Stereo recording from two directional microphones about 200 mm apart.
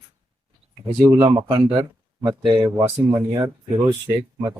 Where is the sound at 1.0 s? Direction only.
15° right (ahead or behind).